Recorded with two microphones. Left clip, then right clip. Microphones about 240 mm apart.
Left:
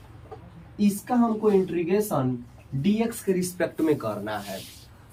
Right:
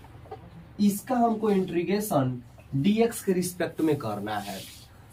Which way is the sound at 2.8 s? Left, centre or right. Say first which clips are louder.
Right 2 dB; centre.